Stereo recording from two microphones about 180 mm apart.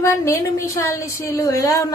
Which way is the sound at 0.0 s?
15° left (ahead or behind).